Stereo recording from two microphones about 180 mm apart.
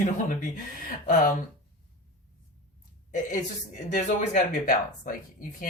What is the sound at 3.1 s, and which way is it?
Speech, 45° left (ahead or behind).